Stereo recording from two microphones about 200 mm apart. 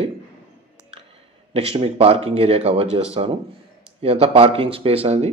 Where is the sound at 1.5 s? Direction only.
30° right (ahead or behind).